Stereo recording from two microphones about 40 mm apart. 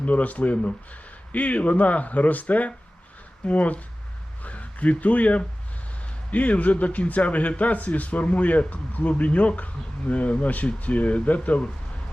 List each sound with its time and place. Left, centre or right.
0.0 s a man's voice: left